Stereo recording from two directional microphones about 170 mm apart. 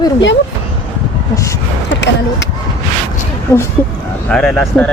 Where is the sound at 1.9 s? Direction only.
90° left.